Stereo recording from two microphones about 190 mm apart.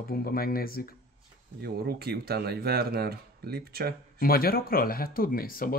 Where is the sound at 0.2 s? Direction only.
50° left (ahead or behind).